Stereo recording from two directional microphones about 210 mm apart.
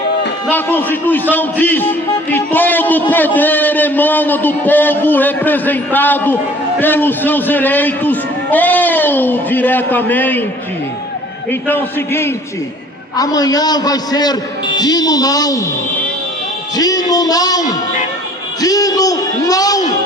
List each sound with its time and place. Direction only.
0.5 s a man's voice: 10° left (ahead or behind)
11.7 s a man's voice: 10° left (ahead or behind)
16.7 s a man's voice: 15° left (ahead or behind)
18.6 s a man's voice: 15° left (ahead or behind)